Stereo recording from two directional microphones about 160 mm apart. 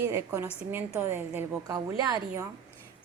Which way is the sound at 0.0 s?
15° right (ahead or behind).